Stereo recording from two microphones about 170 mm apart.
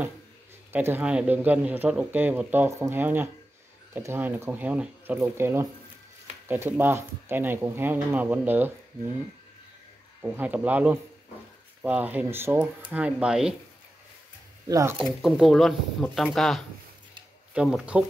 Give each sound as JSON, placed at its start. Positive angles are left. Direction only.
{"t": 0.7, "sound": "speech", "side_deg": -10}
{"t": 10.2, "sound": "speech", "side_deg": -10}
{"t": 14.7, "sound": "speech", "side_deg": -20}
{"t": 15.0, "sound": "speech", "side_deg": -5}